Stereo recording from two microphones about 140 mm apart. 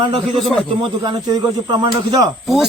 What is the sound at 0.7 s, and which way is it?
Speech, 35° right (ahead or behind).